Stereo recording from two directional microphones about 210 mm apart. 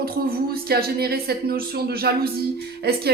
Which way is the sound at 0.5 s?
45° right (ahead or behind).